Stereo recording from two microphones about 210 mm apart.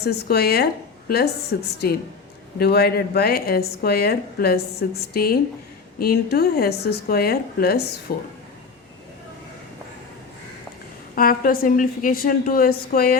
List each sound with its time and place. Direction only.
0.0 s a woman's voice: 50° left (ahead or behind)
11.1 s a woman's voice: 40° left (ahead or behind)